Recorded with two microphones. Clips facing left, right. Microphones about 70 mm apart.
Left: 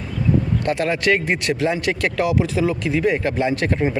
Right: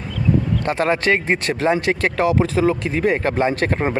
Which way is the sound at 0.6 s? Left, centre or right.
Right.